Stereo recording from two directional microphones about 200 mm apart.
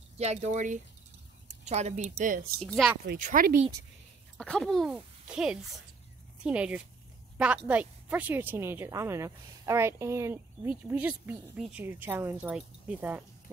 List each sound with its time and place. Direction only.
0.2 s speech: 35° right (ahead or behind)
2.6 s speech: centre (ahead or behind)
3.2 s speech: 40° right (ahead or behind)
4.4 s a woman's voice: 5° left (ahead or behind)